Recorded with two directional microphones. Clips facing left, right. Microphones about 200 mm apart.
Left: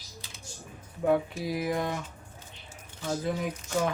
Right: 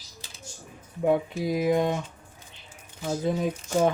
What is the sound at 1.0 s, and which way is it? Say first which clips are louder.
Speech: right 2 dB; 20° right (ahead or behind).